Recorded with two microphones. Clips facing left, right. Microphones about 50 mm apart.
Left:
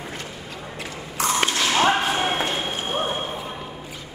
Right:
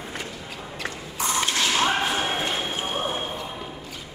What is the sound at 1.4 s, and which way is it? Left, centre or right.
Whip, left.